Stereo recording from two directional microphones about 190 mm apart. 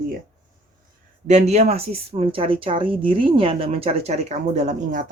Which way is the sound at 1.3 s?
35° right (ahead or behind).